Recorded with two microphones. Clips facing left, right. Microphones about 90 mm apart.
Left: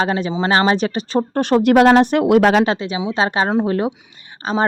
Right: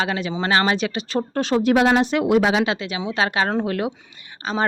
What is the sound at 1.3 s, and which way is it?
Speech, 55° left (ahead or behind).